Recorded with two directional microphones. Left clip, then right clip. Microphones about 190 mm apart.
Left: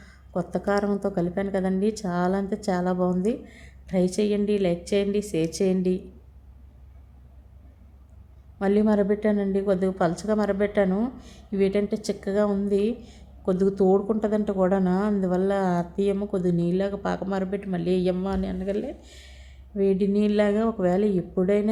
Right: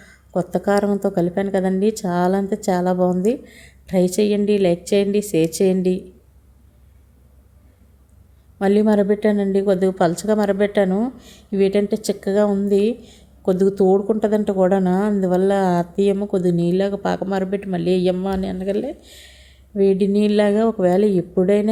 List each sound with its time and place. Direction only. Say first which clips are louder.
0.0 s a woman's voice: right 7 dB; 25° right (ahead or behind)
8.5 s a woman's voice: right 6 dB; 25° right (ahead or behind)